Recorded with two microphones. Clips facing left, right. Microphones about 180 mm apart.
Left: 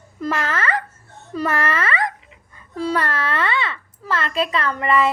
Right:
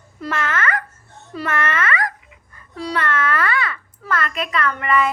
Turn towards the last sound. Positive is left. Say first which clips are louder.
# left 1 dB
turn(degrees=30)  # may be behind; listen again after turning